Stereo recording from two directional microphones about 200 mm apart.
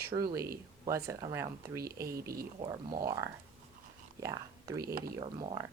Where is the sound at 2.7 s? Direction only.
15° right (ahead or behind).